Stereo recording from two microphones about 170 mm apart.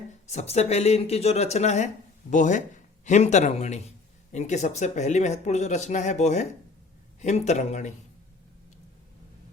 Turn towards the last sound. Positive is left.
turn(degrees=40)  # may be behind; listen again after turning